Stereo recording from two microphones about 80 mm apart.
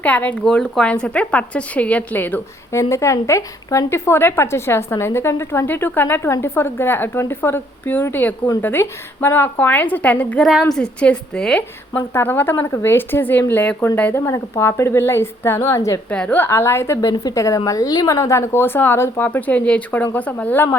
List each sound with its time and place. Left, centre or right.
0.0 s a woman's voice: centre
2.7 s a woman's voice: left; by 10.4 s centre
10.4 s a woman's voice: centre
10.7 s a woman's voice: centre
11.9 s speech: left
14.2 s a woman's voice: left
16.0 s a woman's voice: centre
16.5 s a woman's voice: left
17.0 s a woman's voice: left